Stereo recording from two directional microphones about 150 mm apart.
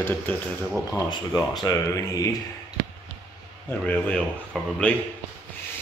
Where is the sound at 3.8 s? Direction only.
10° left (ahead or behind).